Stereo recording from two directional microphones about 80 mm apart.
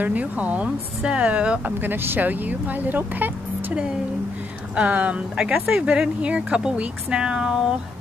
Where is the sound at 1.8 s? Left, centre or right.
Right; by 7.6 s centre.